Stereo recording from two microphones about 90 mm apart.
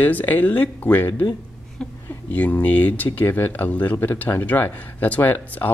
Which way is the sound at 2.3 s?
15° left (ahead or behind).